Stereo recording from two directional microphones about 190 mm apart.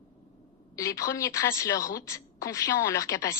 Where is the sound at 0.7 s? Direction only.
15° left (ahead or behind).